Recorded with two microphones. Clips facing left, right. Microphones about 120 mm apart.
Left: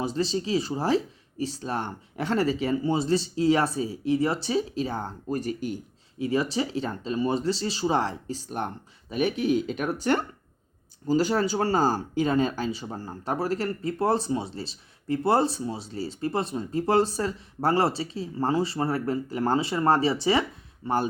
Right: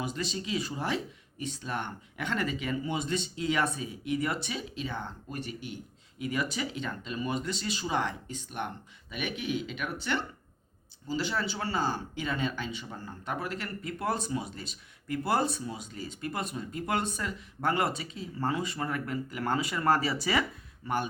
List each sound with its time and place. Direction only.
0.0 s speech: 30° left (ahead or behind)